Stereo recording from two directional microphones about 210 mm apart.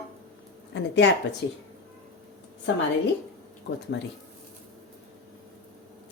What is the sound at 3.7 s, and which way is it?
Speech, 50° left (ahead or behind).